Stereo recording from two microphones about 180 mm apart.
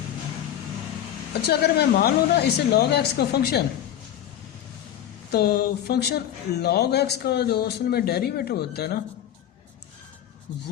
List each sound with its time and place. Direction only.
1.3 s speech: 65° left (ahead or behind)
5.3 s speech: 60° left (ahead or behind)